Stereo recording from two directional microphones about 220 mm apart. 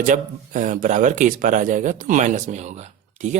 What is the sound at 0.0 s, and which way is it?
Speech, 35° right (ahead or behind).